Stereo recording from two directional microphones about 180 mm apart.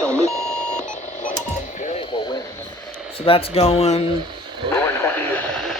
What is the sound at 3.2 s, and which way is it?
Speech, 30° left (ahead or behind).